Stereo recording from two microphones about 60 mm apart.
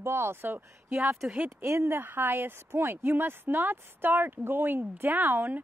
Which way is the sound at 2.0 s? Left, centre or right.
Right.